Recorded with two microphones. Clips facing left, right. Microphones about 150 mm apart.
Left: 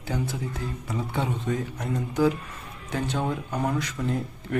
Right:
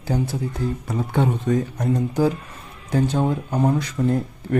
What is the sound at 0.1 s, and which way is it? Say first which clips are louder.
Speech: right 6 dB; 35° right (ahead or behind).